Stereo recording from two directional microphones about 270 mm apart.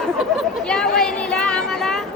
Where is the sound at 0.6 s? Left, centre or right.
Centre.